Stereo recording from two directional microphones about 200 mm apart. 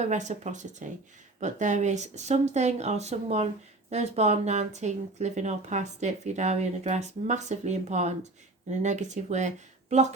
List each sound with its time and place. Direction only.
0.0 s speech: 35° right (ahead or behind)